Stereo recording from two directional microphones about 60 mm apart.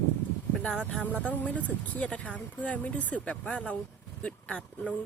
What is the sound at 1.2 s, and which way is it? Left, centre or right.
Speech, left.